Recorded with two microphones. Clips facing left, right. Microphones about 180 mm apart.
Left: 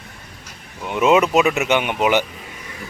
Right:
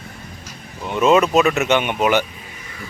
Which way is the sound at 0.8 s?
15° left (ahead or behind).